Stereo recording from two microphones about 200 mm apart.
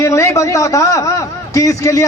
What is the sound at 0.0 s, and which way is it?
A man's voice, 15° left (ahead or behind).